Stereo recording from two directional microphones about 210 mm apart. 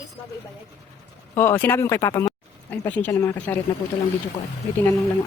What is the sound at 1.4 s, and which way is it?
Speech, 10° left (ahead or behind).